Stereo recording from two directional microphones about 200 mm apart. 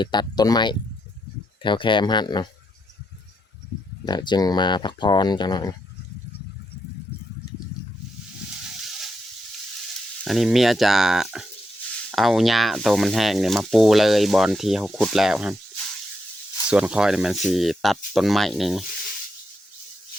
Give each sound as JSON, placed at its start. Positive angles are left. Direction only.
{"t": 0.0, "sound": "speech", "side_deg": 20}
{"t": 4.0, "sound": "speech", "side_deg": 20}
{"t": 10.2, "sound": "speech", "side_deg": 0}
{"t": 16.6, "sound": "speech", "side_deg": -5}